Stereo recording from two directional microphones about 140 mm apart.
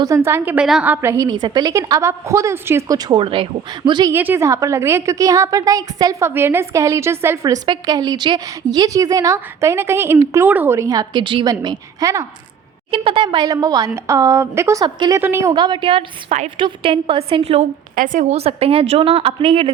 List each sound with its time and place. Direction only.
0.3 s a woman's voice: 15° right (ahead or behind)
1.1 s a woman's voice: 25° right (ahead or behind)
4.1 s a woman's voice: 15° right (ahead or behind)
12.9 s a woman's voice: 40° right (ahead or behind)
15.2 s a woman's voice: 20° right (ahead or behind)
15.5 s a woman's voice: 30° right (ahead or behind); by 17.7 s 50° right (ahead or behind)
17.9 s a woman's voice: 70° right (ahead or behind); by 19.7 s 40° right (ahead or behind)